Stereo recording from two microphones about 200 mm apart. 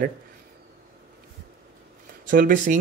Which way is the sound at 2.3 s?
45° right (ahead or behind).